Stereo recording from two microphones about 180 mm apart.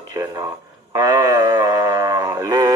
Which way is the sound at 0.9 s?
20° right (ahead or behind).